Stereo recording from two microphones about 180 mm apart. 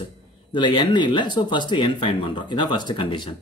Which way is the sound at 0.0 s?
25° left (ahead or behind).